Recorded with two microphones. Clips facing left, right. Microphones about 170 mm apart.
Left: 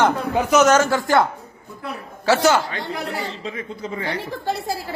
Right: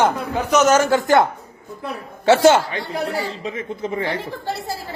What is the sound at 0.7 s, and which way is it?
Speech, 20° right (ahead or behind).